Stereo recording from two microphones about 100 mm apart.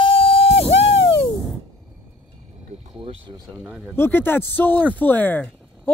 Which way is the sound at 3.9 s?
20° left (ahead or behind).